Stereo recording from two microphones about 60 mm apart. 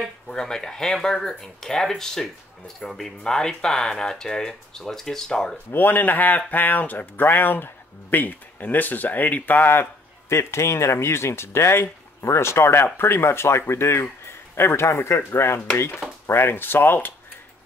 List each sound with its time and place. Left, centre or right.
0.3 s speech: centre
5.7 s speech: left
10.3 s speech: left
14.2 s a sound: left
15.0 s speech: left